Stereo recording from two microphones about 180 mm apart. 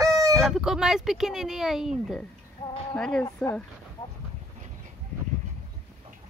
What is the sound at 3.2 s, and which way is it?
Speech, 15° left (ahead or behind).